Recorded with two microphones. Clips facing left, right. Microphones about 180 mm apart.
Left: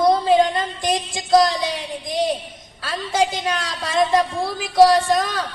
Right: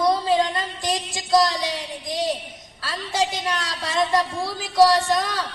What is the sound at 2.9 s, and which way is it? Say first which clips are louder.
A woman's voice: left 4 dB; 55° left (ahead or behind).